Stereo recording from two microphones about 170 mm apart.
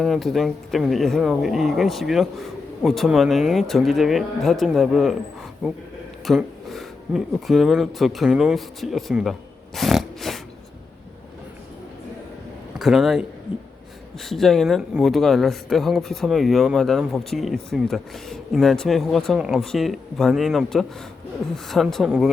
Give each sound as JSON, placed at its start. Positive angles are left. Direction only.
{"t": 0.0, "sound": "speech", "side_deg": 0}
{"t": 9.7, "sound": "a sound", "side_deg": 0}
{"t": 12.8, "sound": "a man's voice", "side_deg": 0}
{"t": 14.3, "sound": "speech", "side_deg": 0}